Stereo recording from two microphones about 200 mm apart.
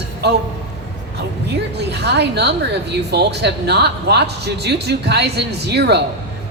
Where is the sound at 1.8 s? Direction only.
55° right (ahead or behind).